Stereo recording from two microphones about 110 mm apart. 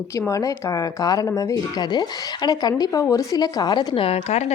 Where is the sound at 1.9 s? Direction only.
40° left (ahead or behind).